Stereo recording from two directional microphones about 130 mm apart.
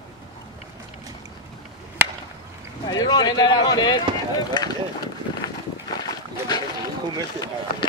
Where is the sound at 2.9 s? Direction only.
30° left (ahead or behind).